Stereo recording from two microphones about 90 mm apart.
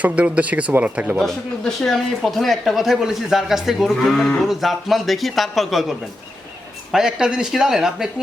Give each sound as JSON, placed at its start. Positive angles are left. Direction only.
{"t": 0.0, "sound": "speech", "side_deg": -15}
{"t": 1.2, "sound": "speech", "side_deg": 5}